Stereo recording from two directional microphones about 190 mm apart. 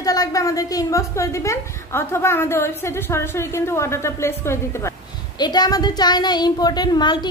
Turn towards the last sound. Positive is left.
turn(degrees=25)  # may be behind; listen again after turning